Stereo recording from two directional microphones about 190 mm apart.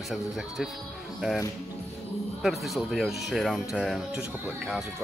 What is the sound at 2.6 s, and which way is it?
Speech, centre (ahead or behind).